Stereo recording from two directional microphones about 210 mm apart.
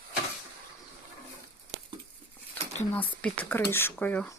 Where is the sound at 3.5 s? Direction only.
10° left (ahead or behind).